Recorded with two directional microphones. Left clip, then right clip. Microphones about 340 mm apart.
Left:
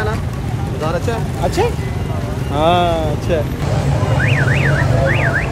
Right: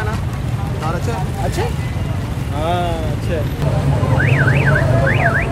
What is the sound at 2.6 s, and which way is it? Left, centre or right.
Speech, centre.